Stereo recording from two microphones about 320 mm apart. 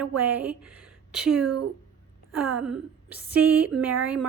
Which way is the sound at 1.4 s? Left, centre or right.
Right.